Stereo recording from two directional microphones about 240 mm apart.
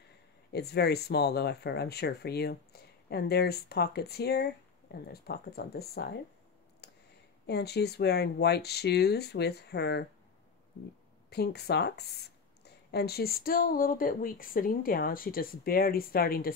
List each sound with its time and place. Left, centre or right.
0.5 s speech: left
6.8 s a sound: left
7.4 s speech: left
11.2 s speech: left